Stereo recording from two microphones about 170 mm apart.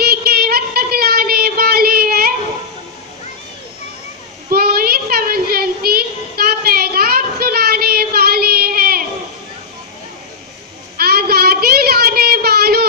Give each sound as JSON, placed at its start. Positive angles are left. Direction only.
{"t": 0.0, "sound": "child singing", "side_deg": -65}
{"t": 4.5, "sound": "child singing", "side_deg": -65}
{"t": 11.0, "sound": "child singing", "side_deg": -65}